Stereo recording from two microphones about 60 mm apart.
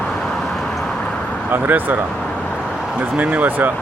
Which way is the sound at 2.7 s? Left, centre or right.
Centre.